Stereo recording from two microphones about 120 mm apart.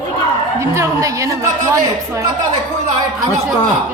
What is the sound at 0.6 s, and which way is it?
A woman's voice, 25° right (ahead or behind).